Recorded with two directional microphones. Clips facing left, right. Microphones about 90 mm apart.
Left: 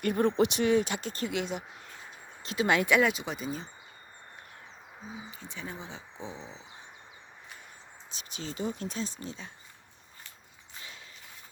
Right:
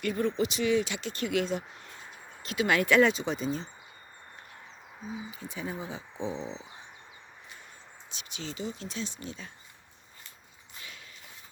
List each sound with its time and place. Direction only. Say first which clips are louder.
0.0 s speech: left 3 dB; 45° left (ahead or behind)
1.3 s speech: right 4 dB; 20° left (ahead or behind)
3.0 s speech: right 3 dB; 5° left (ahead or behind)
5.4 s speech: right 4 dB; 10° right (ahead or behind)
6.3 s a sound: right 7 dB; 25° right (ahead or behind)
8.1 s speech: even; 40° left (ahead or behind)